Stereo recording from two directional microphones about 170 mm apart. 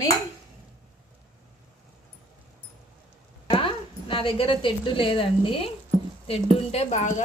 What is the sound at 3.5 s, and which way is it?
A woman's voice, 30° left (ahead or behind).